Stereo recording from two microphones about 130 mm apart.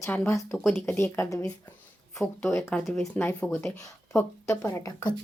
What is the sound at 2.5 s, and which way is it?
A woman's voice, 20° left (ahead or behind).